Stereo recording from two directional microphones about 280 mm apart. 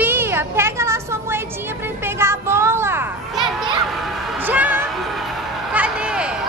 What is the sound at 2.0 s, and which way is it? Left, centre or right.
Children playing, centre.